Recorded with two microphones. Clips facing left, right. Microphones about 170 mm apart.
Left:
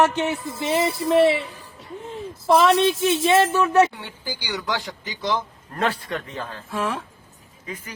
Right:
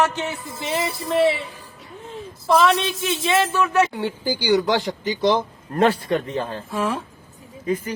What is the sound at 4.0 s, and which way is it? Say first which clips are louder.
A man's voice: right 10 dB; 35° right (ahead or behind).